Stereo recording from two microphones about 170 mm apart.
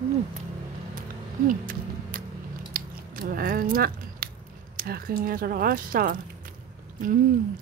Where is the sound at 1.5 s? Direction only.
55° right (ahead or behind).